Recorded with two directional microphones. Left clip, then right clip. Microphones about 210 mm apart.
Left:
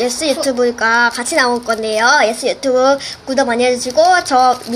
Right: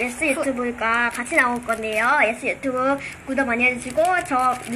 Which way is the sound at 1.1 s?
40° left (ahead or behind).